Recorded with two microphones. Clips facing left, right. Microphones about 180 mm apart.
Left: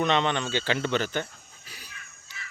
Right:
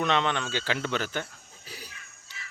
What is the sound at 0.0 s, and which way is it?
Speech, centre (ahead or behind).